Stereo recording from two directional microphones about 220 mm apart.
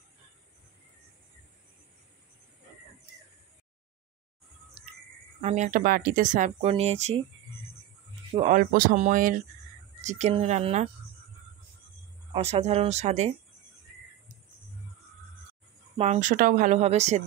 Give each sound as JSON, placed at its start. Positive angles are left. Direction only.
{"t": 4.8, "sound": "a sound", "side_deg": -30}
{"t": 5.4, "sound": "speech", "side_deg": -30}
{"t": 8.3, "sound": "speech", "side_deg": -30}
{"t": 12.4, "sound": "speech", "side_deg": -30}
{"t": 16.0, "sound": "speech", "side_deg": -35}